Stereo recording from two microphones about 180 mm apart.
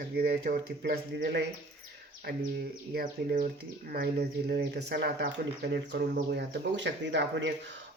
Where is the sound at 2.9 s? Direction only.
55° right (ahead or behind); by 5.3 s 70° right (ahead or behind).